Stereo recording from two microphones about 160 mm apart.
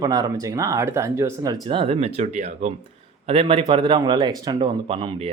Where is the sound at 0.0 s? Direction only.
25° right (ahead or behind).